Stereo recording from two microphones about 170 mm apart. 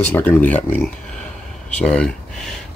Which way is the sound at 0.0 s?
10° left (ahead or behind).